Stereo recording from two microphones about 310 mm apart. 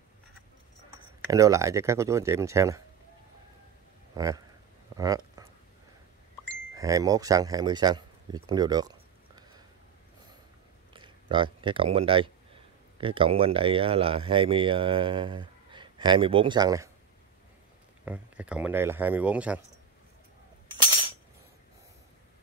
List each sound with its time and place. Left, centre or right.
1.3 s speech: centre
4.1 s speech: centre
4.9 s a sound: centre
6.7 s speech: centre
8.5 s a sound: centre
10.9 s speech: centre
18.0 s speech: centre